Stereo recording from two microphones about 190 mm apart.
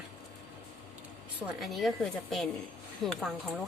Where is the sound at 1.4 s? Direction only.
Centre (ahead or behind).